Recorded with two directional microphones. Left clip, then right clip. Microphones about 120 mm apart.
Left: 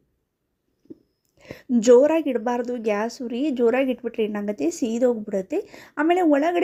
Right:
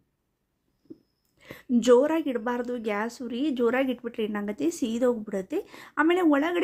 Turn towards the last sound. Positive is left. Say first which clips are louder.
# left 4 dB
turn(degrees=20)  # may be behind; listen again after turning